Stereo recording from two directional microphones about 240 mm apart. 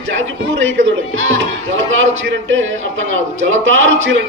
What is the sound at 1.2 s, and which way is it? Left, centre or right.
A man's voice, right.